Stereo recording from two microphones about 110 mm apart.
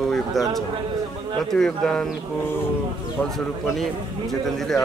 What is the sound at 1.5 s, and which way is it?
Speech, 5° left (ahead or behind).